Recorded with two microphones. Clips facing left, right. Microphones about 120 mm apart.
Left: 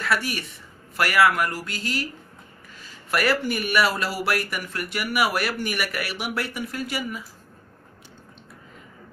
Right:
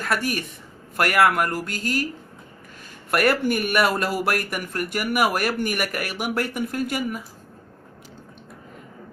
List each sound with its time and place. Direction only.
0.0 s speech: 45° right (ahead or behind)
3.1 s speech: 50° right (ahead or behind)